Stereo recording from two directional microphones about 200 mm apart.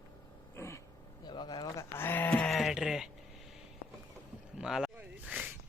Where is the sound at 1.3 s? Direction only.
25° left (ahead or behind); by 3.1 s centre (ahead or behind).